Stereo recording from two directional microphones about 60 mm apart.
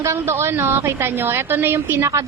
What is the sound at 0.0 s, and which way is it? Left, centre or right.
A woman's voice, right.